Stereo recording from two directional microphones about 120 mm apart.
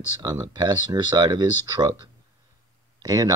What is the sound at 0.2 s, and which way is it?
Speech, 30° right (ahead or behind).